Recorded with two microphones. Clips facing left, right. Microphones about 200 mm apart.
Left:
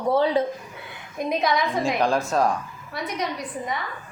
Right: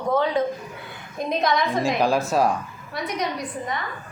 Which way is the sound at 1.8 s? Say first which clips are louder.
Right 1 dB; 5° right (ahead or behind).